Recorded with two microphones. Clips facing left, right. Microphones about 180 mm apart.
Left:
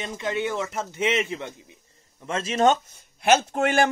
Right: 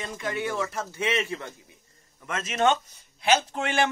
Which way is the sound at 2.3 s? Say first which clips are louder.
Left 3 dB; 30° left (ahead or behind).